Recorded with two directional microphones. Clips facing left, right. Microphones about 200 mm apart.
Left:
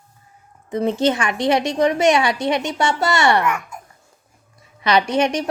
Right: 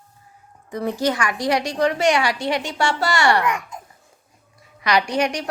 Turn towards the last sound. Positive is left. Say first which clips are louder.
# left 3 dB
turn(degrees=25)  # may be behind; listen again after turning